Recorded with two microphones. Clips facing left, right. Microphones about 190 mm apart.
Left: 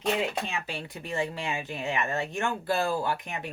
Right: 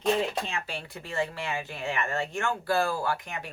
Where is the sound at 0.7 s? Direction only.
15° left (ahead or behind).